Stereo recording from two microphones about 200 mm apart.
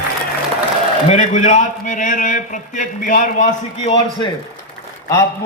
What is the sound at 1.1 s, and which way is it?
A man's voice, 35° left (ahead or behind).